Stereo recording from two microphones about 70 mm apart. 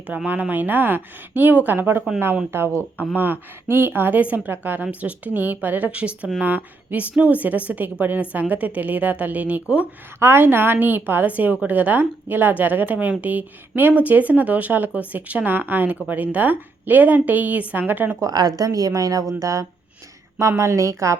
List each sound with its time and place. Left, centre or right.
0.3 s a woman's voice: right
2.7 s speech: left
3.7 s a woman's voice: right
10.2 s a woman's voice: right
18.2 s a woman's voice: right